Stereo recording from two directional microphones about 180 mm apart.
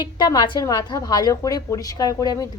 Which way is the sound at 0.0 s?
25° left (ahead or behind).